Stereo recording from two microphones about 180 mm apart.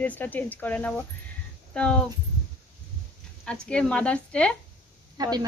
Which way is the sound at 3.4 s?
5° left (ahead or behind).